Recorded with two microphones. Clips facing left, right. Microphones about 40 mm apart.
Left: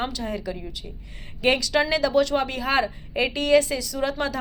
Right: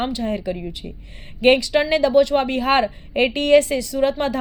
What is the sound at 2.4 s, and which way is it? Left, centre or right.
A woman's voice, right.